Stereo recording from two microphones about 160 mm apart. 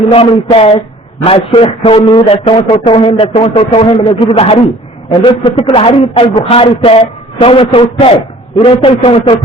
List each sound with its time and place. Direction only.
0.1 s a man's voice: 35° left (ahead or behind)